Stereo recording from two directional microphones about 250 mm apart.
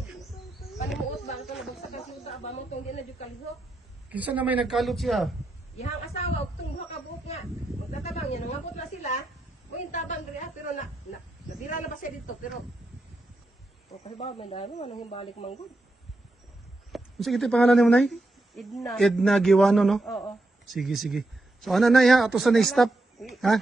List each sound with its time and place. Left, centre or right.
4.1 s speech: centre
5.8 s speech: left
8.0 s a sound: left
9.8 s a man's voice: left
14.1 s speech: left
16.9 s speech: centre